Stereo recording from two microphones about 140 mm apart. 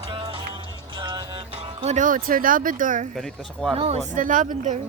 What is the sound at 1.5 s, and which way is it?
Speech, 45° right (ahead or behind).